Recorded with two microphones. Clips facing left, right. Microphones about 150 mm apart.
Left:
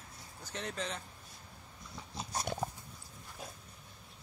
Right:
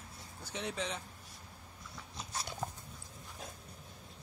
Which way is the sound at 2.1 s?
45° left (ahead or behind).